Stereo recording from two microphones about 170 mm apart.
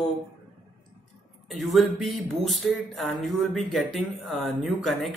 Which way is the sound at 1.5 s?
Centre (ahead or behind).